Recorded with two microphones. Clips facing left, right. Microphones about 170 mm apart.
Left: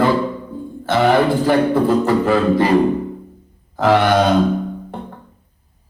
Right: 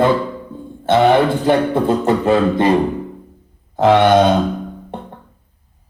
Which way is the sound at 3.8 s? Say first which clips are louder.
Right 3 dB; 20° right (ahead or behind).